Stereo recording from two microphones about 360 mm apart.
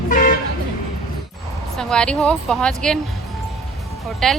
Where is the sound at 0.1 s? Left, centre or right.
Left.